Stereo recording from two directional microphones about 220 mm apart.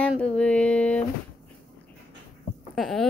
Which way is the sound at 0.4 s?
5° left (ahead or behind).